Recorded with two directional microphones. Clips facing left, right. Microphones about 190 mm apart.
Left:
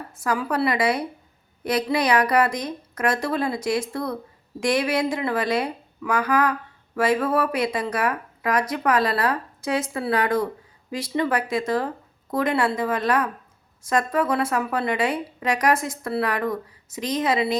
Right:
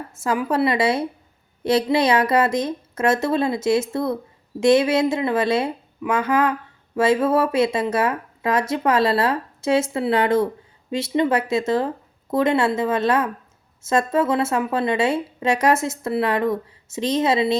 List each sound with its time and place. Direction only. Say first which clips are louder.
0.1 s speech: right 3 dB; 25° right (ahead or behind)